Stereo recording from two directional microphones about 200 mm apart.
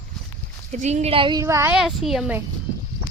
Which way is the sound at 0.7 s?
35° right (ahead or behind).